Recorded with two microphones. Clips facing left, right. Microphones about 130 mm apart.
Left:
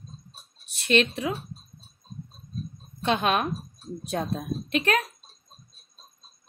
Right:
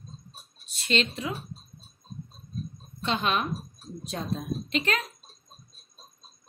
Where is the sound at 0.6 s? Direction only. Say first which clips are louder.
Left 5 dB; 60° left (ahead or behind).